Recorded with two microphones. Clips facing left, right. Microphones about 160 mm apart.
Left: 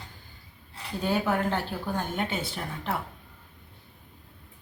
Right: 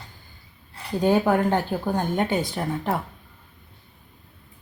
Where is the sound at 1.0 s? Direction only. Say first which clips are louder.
Right 7 dB; 40° right (ahead or behind).